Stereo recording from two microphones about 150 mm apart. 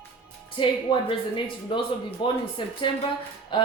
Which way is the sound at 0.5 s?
35° left (ahead or behind).